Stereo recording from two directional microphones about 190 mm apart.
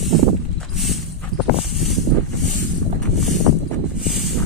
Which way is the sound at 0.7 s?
Centre (ahead or behind).